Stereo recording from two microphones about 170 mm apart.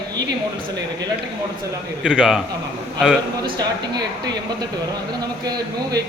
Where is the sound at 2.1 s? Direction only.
5° right (ahead or behind).